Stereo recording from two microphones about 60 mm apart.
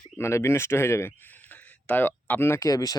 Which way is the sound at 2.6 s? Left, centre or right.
Left.